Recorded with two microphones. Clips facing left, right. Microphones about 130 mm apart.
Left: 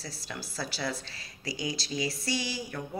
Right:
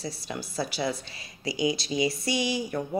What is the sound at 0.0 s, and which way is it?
A woman's voice, 20° right (ahead or behind).